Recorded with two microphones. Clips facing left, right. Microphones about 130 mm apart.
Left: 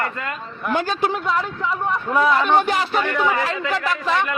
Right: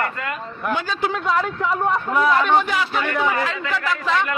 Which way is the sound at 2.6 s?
45° left (ahead or behind).